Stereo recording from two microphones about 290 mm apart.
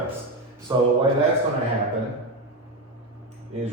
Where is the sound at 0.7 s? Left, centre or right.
Centre.